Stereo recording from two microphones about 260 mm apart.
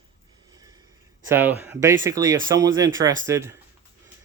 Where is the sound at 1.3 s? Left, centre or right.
Centre.